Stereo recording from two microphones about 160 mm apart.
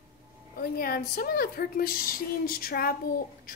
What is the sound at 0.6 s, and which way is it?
A woman's voice, 65° left (ahead or behind).